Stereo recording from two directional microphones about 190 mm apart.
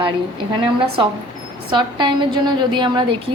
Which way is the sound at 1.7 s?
25° right (ahead or behind).